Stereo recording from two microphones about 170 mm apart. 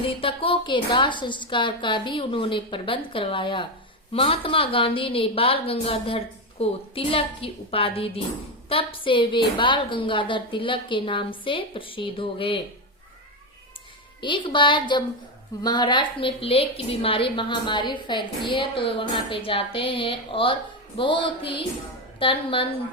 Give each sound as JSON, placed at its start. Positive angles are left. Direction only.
{"t": 0.1, "sound": "a woman's voice", "side_deg": 30}
{"t": 14.2, "sound": "a woman's voice", "side_deg": 30}